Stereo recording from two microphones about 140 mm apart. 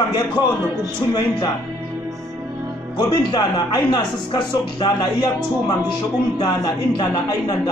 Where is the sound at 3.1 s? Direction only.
30° left (ahead or behind).